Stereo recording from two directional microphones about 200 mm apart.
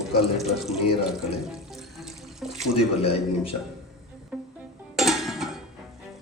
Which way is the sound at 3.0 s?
30° left (ahead or behind).